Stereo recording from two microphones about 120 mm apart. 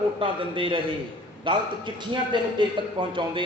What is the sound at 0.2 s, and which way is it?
A man's voice, 45° right (ahead or behind).